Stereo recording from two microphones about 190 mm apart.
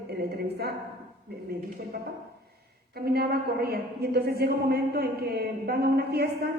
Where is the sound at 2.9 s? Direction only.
55° right (ahead or behind).